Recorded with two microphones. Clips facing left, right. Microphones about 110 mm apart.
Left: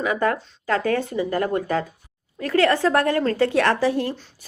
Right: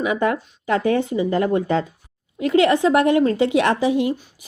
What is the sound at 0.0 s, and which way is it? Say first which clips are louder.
Speech: right 2 dB; 20° right (ahead or behind).